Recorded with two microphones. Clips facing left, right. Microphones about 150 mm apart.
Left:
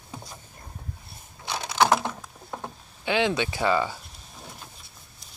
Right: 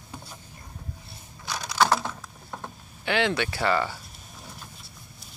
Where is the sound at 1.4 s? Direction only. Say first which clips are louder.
Left 1 dB; 25° left (ahead or behind).